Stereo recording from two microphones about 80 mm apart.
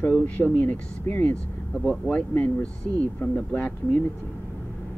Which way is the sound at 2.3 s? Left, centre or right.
Centre.